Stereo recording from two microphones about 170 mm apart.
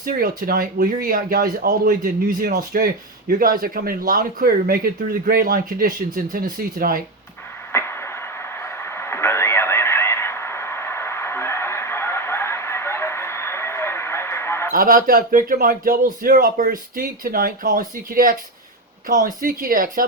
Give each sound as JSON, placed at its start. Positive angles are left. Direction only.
{"t": 0.0, "sound": "speech", "side_deg": -60}
{"t": 7.7, "sound": "radio", "side_deg": 15}
{"t": 14.7, "sound": "speech", "side_deg": -55}